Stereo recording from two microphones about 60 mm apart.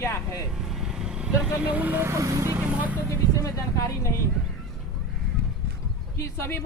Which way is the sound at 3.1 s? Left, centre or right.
Left.